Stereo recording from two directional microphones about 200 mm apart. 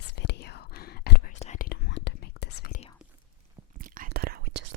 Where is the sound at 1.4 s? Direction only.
40° left (ahead or behind).